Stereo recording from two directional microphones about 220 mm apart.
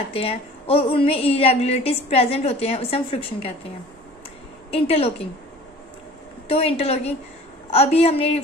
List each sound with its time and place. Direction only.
0.1 s a woman's voice: 25° left (ahead or behind)
4.7 s a woman's voice: 25° left (ahead or behind)
6.5 s a woman's voice: 25° left (ahead or behind)